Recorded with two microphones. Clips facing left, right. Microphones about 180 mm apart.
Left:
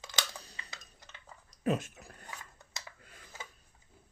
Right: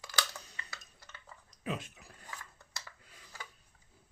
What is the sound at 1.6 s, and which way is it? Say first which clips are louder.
Speech: left 7 dB; 45° left (ahead or behind).